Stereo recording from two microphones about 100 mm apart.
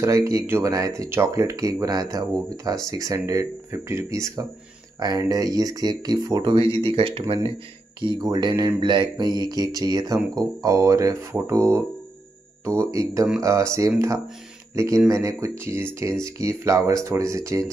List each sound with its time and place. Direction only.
0.0 s speech: 30° right (ahead or behind)
6.4 s speech: 60° right (ahead or behind)
8.0 s mantra: 45° right (ahead or behind)
9.4 s speech: 40° right (ahead or behind)